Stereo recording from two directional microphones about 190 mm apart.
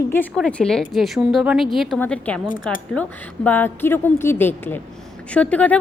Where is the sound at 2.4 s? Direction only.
45° left (ahead or behind).